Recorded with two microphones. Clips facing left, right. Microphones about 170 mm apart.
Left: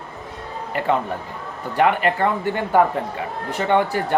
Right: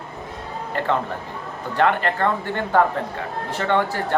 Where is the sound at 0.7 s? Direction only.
15° left (ahead or behind).